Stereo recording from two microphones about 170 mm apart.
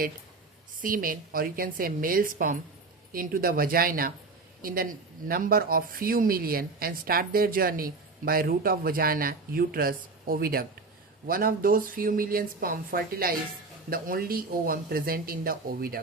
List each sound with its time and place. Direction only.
0.8 s speech: 55° right (ahead or behind)